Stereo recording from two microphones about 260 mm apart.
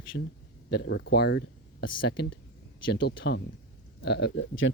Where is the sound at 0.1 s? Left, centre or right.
Left.